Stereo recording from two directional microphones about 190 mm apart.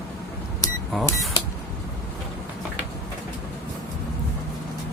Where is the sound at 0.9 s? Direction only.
Centre (ahead or behind).